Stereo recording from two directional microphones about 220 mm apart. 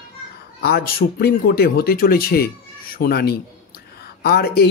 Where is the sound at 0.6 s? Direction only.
45° left (ahead or behind).